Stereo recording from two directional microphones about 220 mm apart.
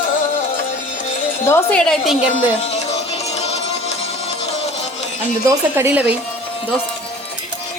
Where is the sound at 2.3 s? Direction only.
30° left (ahead or behind).